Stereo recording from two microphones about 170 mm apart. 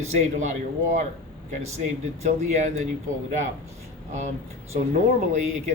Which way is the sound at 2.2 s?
40° right (ahead or behind).